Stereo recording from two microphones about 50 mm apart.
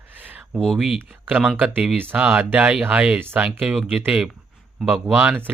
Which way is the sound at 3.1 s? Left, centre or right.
Right.